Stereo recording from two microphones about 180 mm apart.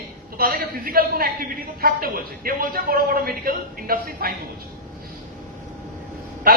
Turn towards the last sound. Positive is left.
turn(degrees=-55)  # may be behind; listen again after turning